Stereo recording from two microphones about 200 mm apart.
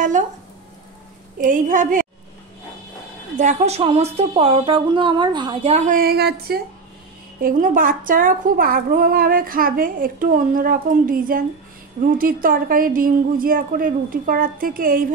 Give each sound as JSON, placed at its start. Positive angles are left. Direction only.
{"t": 1.4, "sound": "a woman's voice", "side_deg": -40}
{"t": 3.3, "sound": "speech", "side_deg": -35}
{"t": 5.9, "sound": "a woman's voice", "side_deg": -50}